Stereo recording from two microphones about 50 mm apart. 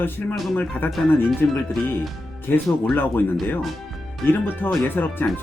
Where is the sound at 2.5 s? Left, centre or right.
Left.